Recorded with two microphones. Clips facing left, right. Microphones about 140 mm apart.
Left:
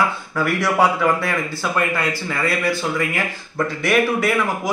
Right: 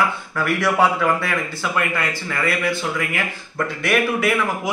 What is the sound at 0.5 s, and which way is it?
Speech, centre (ahead or behind).